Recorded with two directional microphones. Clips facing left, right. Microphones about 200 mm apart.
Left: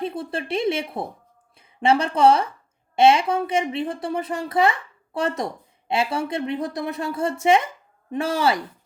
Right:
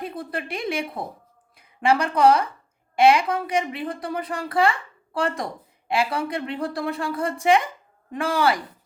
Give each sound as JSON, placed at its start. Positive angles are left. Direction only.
{"t": 0.0, "sound": "a woman's voice", "side_deg": 25}